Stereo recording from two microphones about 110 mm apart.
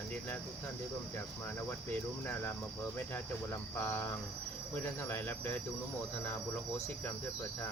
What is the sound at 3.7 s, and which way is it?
Cricket, 20° left (ahead or behind).